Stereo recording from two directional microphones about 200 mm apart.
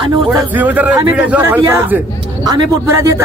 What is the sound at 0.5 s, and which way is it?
Speech, 10° right (ahead or behind).